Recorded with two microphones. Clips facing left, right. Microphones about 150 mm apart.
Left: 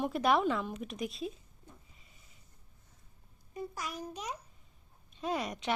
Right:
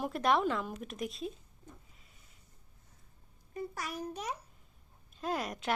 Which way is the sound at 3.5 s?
55° right (ahead or behind).